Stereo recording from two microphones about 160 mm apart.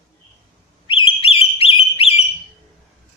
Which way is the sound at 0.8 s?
35° left (ahead or behind).